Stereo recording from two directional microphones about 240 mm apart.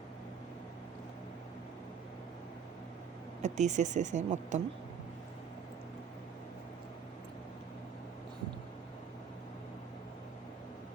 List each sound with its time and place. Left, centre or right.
3.4 s speech: right